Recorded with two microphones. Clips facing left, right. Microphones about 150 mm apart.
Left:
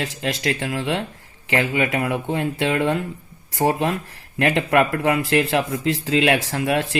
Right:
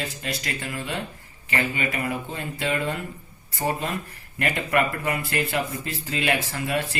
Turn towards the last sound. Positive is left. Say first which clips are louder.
# left 6 dB
turn(degrees=90)